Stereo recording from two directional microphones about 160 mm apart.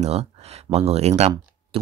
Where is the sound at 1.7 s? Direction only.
35° right (ahead or behind).